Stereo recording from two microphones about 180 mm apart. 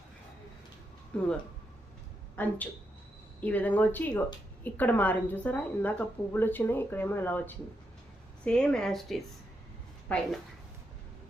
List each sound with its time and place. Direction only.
1.1 s speech: 5° left (ahead or behind)
2.3 s a woman's voice: 10° left (ahead or behind)